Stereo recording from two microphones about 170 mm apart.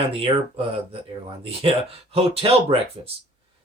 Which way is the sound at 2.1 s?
35° right (ahead or behind).